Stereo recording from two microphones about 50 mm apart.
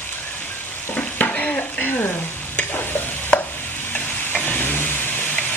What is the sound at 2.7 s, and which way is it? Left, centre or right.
Stir, left.